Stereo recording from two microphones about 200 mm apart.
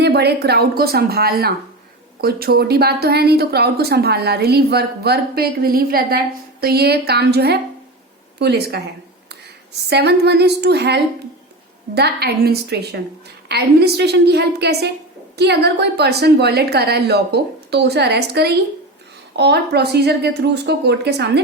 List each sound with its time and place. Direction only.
0.0 s a woman's voice: 55° right (ahead or behind)
9.9 s a woman's voice: 55° right (ahead or behind)